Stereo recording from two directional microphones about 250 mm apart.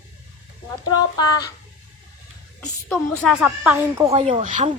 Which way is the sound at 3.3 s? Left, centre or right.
Centre.